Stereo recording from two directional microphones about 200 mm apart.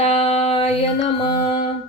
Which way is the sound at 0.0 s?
30° left (ahead or behind).